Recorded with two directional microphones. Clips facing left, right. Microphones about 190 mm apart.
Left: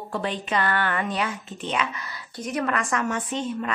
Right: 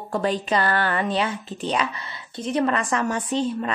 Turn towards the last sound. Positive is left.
turn(degrees=-35)  # may be behind; listen again after turning